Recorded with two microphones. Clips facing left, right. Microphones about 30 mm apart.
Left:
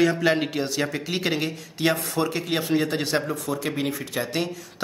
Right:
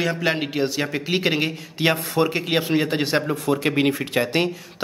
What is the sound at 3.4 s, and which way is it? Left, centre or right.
Speech, right.